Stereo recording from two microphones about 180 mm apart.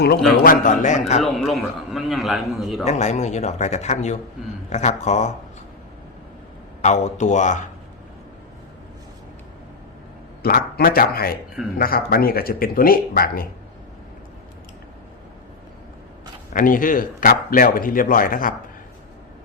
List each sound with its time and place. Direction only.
0.4 s speech: 45° left (ahead or behind)
1.2 s a man's voice: centre (ahead or behind)
2.8 s speech: 40° left (ahead or behind)
6.8 s speech: 40° left (ahead or behind)
10.4 s speech: 55° left (ahead or behind)
16.5 s speech: 50° left (ahead or behind)